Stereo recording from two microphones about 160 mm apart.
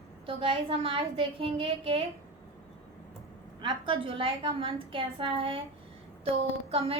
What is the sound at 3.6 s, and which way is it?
A woman's voice, 30° right (ahead or behind).